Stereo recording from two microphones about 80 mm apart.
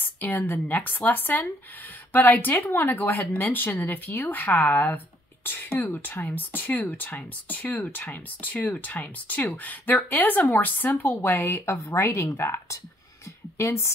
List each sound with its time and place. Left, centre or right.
0.2 s speech: left